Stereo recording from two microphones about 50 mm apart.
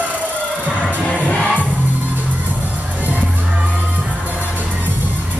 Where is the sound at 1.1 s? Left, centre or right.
Left.